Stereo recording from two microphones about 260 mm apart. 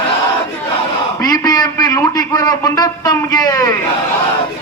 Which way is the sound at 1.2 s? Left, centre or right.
Centre.